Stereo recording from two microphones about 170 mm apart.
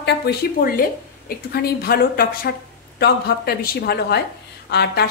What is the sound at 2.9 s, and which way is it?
A woman's voice, 70° left (ahead or behind).